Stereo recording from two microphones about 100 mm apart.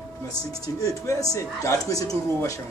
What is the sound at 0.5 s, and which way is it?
Speech, 35° left (ahead or behind).